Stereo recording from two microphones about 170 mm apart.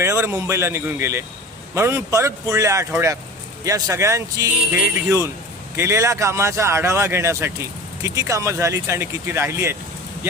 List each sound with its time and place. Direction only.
0.0 s speech: 15° right (ahead or behind)